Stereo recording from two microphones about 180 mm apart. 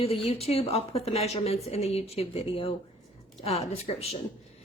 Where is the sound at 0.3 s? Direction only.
35° left (ahead or behind).